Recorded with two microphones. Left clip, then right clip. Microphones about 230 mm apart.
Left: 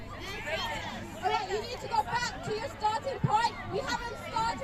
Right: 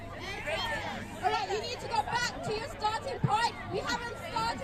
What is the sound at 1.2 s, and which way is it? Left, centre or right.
Hubbub, right.